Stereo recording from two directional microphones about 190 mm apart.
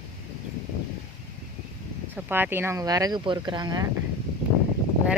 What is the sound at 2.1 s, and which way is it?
Speech, 10° right (ahead or behind).